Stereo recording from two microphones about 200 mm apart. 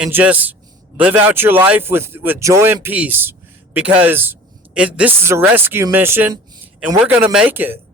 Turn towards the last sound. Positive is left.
turn(degrees=-10)  # may be behind; listen again after turning